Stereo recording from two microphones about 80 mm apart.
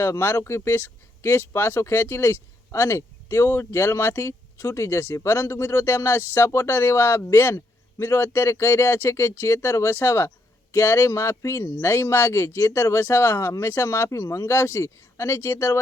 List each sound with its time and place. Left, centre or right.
0.0 s speech: left